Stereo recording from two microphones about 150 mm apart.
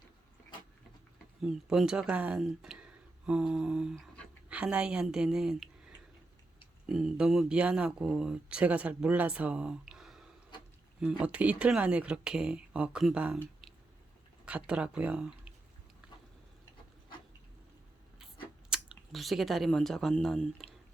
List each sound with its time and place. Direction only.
1.4 s speech: 5° right (ahead or behind)
14.4 s speech: 10° right (ahead or behind)
18.7 s speech: centre (ahead or behind)